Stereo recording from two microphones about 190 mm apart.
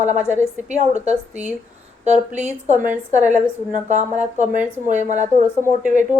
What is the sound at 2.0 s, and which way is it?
Speech, 35° right (ahead or behind).